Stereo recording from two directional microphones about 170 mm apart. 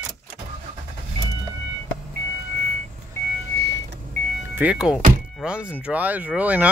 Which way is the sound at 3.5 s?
80° right.